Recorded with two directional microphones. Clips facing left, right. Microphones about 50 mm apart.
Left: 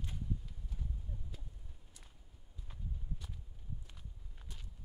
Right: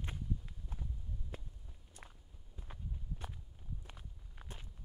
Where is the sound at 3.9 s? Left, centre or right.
Right.